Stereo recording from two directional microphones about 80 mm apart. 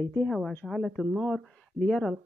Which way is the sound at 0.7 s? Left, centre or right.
Centre.